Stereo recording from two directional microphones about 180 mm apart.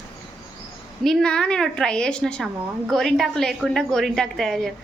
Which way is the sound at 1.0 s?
5° left (ahead or behind).